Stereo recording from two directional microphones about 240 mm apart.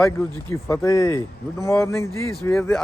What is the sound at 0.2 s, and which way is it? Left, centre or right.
A man's voice, centre.